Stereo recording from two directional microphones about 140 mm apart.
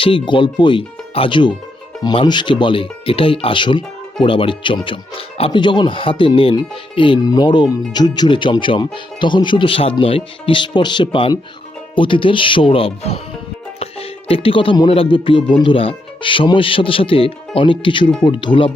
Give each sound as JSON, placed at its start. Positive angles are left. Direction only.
{"t": 0.0, "sound": "speech", "side_deg": 35}
{"t": 14.3, "sound": "speech", "side_deg": 40}